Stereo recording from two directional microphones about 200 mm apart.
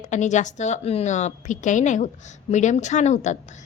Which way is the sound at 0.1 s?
35° left (ahead or behind).